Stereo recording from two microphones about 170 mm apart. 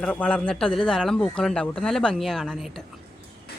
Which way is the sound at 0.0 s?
5° left (ahead or behind).